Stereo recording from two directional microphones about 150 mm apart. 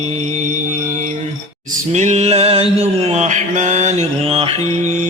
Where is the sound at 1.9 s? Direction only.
50° right (ahead or behind).